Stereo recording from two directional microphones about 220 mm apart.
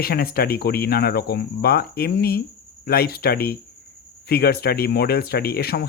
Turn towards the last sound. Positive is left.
turn(degrees=45)  # may be behind; listen again after turning